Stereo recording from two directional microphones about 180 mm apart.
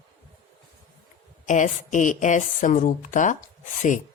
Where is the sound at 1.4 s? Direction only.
45° left (ahead or behind).